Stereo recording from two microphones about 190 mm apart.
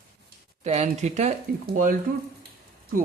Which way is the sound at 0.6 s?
35° right (ahead or behind).